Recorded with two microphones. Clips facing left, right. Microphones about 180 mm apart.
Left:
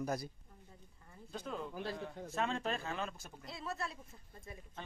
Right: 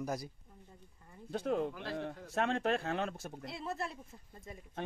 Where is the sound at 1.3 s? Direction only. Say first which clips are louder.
Right 8 dB; 65° right (ahead or behind).